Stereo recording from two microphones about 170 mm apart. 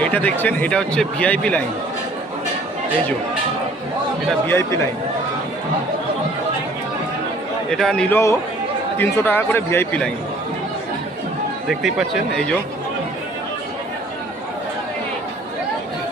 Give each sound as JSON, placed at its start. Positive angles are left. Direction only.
{"t": 0.0, "sound": "speech", "side_deg": 10}
{"t": 4.3, "sound": "speech", "side_deg": 15}
{"t": 7.7, "sound": "speech", "side_deg": 0}
{"t": 8.1, "sound": "speech", "side_deg": 15}
{"t": 11.7, "sound": "speech", "side_deg": 0}